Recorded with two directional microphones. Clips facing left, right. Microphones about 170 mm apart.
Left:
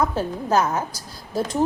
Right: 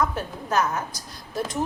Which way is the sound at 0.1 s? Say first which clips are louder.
Left 5 dB; 30° left (ahead or behind).